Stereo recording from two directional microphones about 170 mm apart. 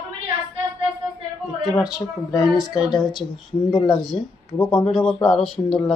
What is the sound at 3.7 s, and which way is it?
Speech, 25° left (ahead or behind).